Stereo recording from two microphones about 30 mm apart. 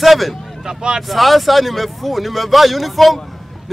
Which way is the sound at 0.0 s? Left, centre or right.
Centre.